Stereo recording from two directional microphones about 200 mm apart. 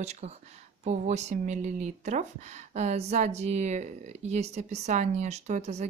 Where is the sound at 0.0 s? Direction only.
35° right (ahead or behind).